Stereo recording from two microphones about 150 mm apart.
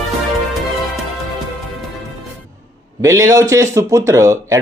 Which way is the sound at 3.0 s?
20° right (ahead or behind).